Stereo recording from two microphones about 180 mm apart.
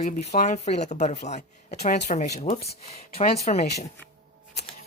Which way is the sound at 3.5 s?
45° left (ahead or behind).